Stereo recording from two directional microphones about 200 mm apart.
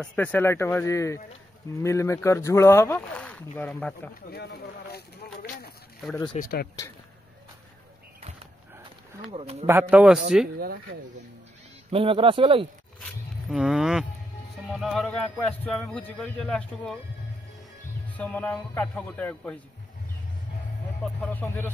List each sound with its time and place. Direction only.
0.0 s speech: 5° left (ahead or behind)
4.3 s speech: 55° left (ahead or behind)
6.4 s speech: 35° left (ahead or behind)
9.3 s a man's voice: 30° right (ahead or behind)
9.7 s a man's voice: 10° right (ahead or behind)
11.9 s a man's voice: 25° right (ahead or behind)
13.5 s a man's voice: 5° right (ahead or behind)
18.0 s speech: 10° left (ahead or behind)
21.0 s speech: 10° left (ahead or behind)